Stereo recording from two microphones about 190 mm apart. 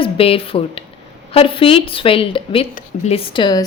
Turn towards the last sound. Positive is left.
turn(degrees=25)  # may be behind; listen again after turning